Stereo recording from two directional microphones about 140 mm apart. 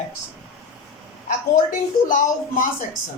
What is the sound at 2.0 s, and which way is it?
Speech, 70° left (ahead or behind).